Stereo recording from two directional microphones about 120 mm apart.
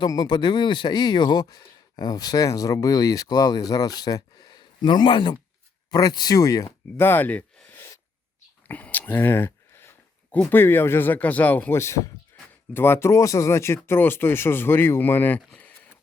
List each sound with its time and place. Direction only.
0.0 s speech: 35° left (ahead or behind)
7.0 s a sound: 15° left (ahead or behind)
10.5 s speech: 20° left (ahead or behind)